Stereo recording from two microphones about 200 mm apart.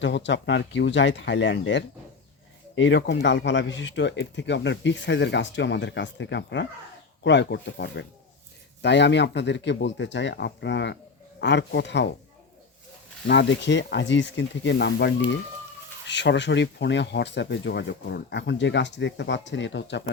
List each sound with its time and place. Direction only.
0.0 s speech: 65° left (ahead or behind)
13.2 s speech: 60° left (ahead or behind)